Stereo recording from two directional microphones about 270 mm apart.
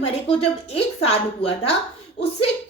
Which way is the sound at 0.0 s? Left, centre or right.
Left.